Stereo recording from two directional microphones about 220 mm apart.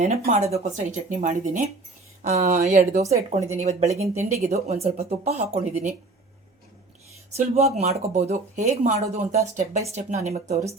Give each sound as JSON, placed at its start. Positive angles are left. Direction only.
{"t": 0.3, "sound": "speech", "side_deg": -30}
{"t": 7.3, "sound": "speech", "side_deg": -30}